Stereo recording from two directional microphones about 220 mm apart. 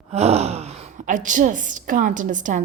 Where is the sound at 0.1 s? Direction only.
30° right (ahead or behind).